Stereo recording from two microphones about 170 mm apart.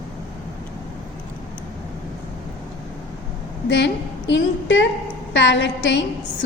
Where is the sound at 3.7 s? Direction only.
90° left.